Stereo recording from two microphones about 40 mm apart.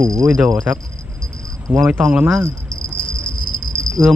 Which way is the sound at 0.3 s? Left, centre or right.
Centre.